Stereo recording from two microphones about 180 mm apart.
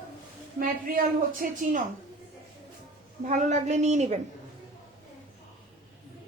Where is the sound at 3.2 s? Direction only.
40° right (ahead or behind).